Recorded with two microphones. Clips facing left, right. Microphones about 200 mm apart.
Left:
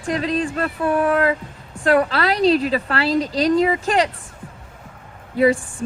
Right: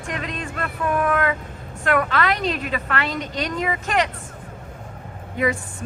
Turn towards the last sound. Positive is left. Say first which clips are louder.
# left 6 dB
turn(degrees=35)  # may be behind; listen again after turning